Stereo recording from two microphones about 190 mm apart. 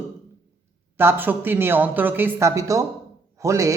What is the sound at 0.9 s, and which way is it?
A man's voice, 10° right (ahead or behind).